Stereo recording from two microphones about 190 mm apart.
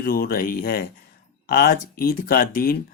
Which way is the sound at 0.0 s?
50° left (ahead or behind).